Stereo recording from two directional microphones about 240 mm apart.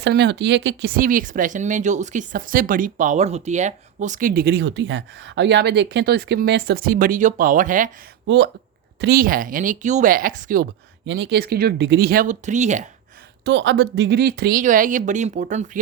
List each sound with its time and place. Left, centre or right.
0.0 s speech: right
9.0 s speech: right
11.0 s speech: right
13.4 s speech: right